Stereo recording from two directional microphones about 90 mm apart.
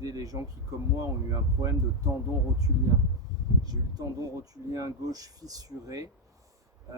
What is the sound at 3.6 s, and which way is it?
Speech, 45° right (ahead or behind).